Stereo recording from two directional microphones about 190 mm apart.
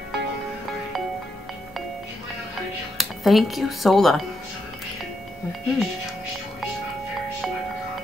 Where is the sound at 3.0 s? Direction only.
Centre (ahead or behind).